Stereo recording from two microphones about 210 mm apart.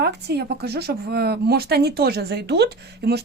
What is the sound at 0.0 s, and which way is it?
Speech, 50° right (ahead or behind).